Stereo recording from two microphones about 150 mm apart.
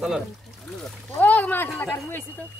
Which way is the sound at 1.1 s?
10° left (ahead or behind).